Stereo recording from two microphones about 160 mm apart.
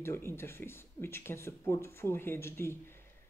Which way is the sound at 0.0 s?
15° left (ahead or behind).